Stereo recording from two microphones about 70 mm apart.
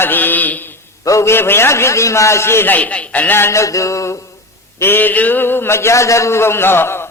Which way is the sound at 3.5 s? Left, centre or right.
Left.